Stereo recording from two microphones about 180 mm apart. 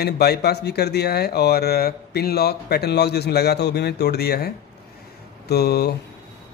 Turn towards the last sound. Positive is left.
turn(degrees=65)  # may be behind; listen again after turning